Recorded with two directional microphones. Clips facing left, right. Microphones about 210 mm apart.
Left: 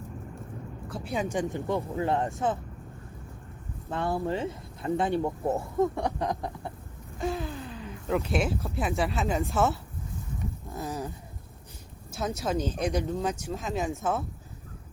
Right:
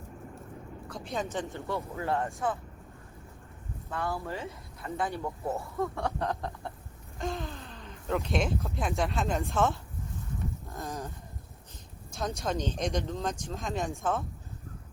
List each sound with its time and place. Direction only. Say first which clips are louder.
0.9 s speech: left 4 dB; 5° left (ahead or behind); by 2.3 s 20° left (ahead or behind)
3.8 s speech: left 5 dB; 25° left (ahead or behind); by 9.7 s 5° left (ahead or behind)
10.7 s a sound: left 6 dB; 10° left (ahead or behind)
12.4 s speech: left 3 dB; 5° left (ahead or behind)